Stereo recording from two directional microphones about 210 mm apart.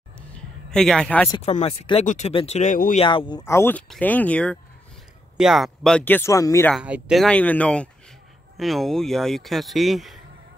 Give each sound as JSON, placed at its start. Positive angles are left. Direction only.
{"t": 0.7, "sound": "speech", "side_deg": 0}
{"t": 1.3, "sound": "speech", "side_deg": 30}
{"t": 3.1, "sound": "speech", "side_deg": 20}
{"t": 6.7, "sound": "speech", "side_deg": -5}